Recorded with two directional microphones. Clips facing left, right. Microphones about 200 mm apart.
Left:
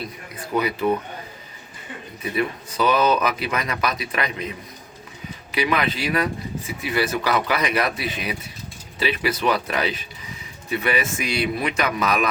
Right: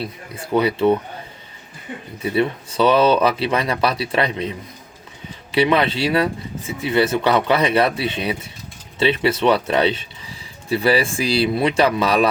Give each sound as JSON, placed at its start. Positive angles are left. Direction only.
{"t": 0.5, "sound": "speech", "side_deg": -30}
{"t": 2.2, "sound": "speech", "side_deg": -30}